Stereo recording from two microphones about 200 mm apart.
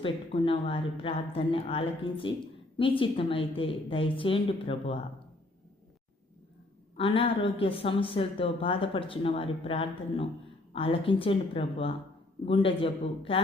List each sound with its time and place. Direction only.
0.0 s a woman's voice: 25° left (ahead or behind)
6.9 s a woman's voice: 25° left (ahead or behind)